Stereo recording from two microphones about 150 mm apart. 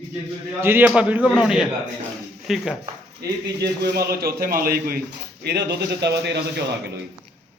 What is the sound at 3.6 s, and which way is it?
A man's voice, 90° right.